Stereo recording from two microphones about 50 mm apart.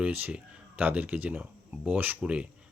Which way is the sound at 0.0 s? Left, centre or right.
Right.